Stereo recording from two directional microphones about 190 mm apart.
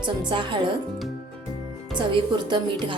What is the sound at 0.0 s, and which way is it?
Speech, 25° right (ahead or behind).